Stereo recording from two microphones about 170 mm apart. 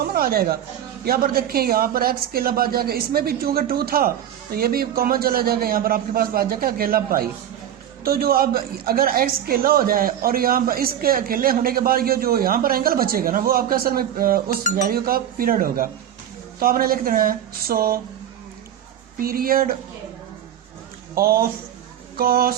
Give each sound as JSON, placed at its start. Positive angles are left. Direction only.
{"t": 0.0, "sound": "a sound", "side_deg": -60}
{"t": 1.0, "sound": "a woman's voice", "side_deg": -60}
{"t": 19.2, "sound": "a woman's voice", "side_deg": -60}
{"t": 21.2, "sound": "a woman's voice", "side_deg": -60}